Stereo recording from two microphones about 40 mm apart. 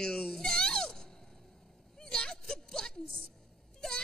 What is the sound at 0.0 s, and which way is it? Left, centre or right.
Baby cry, centre.